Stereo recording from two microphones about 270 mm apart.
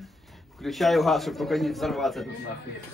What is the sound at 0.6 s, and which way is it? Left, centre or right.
Speech, centre.